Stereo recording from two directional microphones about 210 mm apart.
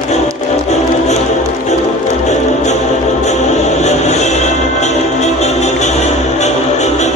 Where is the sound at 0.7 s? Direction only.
30° left (ahead or behind).